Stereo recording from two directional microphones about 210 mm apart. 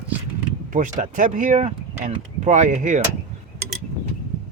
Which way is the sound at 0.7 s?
40° right (ahead or behind).